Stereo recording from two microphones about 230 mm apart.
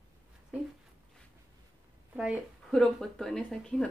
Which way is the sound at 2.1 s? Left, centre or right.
Centre.